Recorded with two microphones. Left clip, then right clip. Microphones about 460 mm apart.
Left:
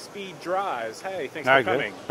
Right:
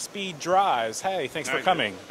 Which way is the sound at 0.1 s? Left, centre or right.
Right.